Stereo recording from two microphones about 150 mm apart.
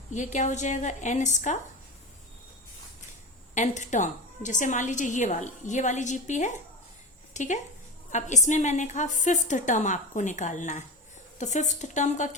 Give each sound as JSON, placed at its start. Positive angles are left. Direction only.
{"t": 0.1, "sound": "a woman's voice", "side_deg": 55}
{"t": 3.5, "sound": "a woman's voice", "side_deg": 55}